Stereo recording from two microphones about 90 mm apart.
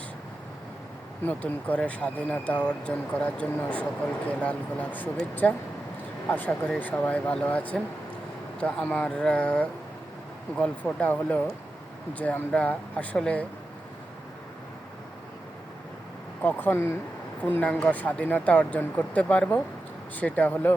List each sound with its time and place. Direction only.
1.2 s speech: 20° left (ahead or behind)
16.4 s speech: 20° left (ahead or behind)